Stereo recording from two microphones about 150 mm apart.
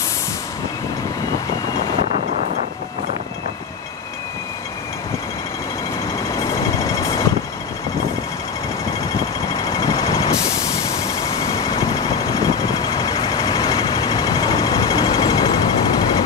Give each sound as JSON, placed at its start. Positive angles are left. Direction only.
{"t": 6.2, "sound": "vehicle", "side_deg": 20}
{"t": 9.5, "sound": "vehicle", "side_deg": 20}